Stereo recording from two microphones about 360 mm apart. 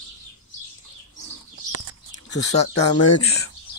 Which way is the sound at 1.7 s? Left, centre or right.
Right.